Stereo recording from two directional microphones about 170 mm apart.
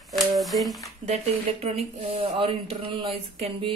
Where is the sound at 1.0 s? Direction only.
40° right (ahead or behind).